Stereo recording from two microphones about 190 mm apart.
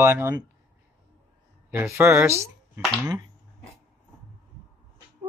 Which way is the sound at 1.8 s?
15° right (ahead or behind).